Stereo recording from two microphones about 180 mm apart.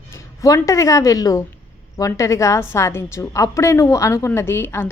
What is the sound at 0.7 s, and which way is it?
A woman's voice, 15° left (ahead or behind).